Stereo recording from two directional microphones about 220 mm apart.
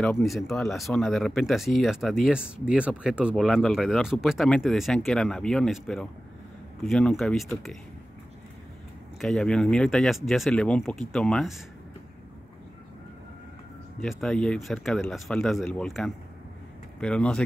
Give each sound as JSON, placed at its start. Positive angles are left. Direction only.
{"t": 0.0, "sound": "speech", "side_deg": 0}
{"t": 9.2, "sound": "speech", "side_deg": 5}
{"t": 14.0, "sound": "speech", "side_deg": 0}